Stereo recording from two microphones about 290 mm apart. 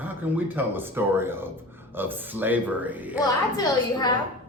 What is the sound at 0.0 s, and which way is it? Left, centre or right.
Speech, centre.